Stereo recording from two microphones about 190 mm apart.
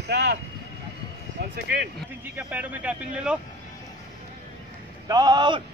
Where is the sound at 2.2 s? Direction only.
10° right (ahead or behind).